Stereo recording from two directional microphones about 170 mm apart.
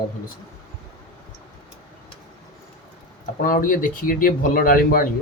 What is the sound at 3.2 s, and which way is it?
Speech, 55° left (ahead or behind).